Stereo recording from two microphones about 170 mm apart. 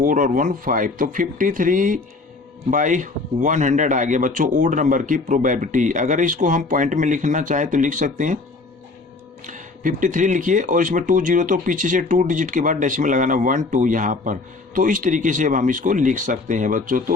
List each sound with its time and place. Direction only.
0.0 s speech: 55° right (ahead or behind)
9.5 s speech: 50° right (ahead or behind)